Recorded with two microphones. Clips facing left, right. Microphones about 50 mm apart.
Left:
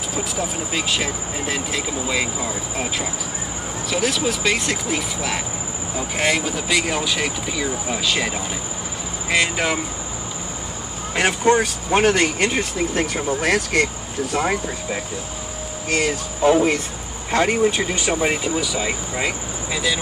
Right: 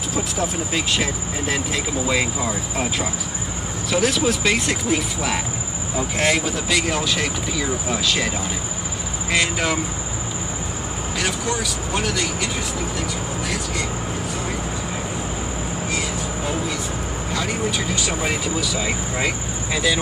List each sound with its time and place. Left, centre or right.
0.1 s speech: centre
9.3 s speech: centre
11.1 s speech: left
14.3 s speech: left
15.9 s speech: left
17.3 s speech: left; by 18.9 s centre
19.1 s speech: centre